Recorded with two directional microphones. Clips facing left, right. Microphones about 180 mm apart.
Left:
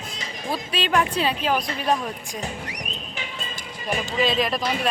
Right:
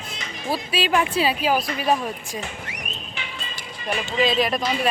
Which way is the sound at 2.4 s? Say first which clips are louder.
Left 1 dB; 40° left (ahead or behind).